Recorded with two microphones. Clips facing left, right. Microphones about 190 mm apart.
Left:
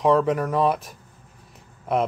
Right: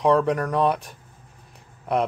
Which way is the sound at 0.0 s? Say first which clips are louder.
Even; centre (ahead or behind).